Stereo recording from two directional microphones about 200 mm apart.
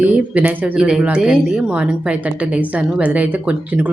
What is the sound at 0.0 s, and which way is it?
A woman's voice, 10° right (ahead or behind).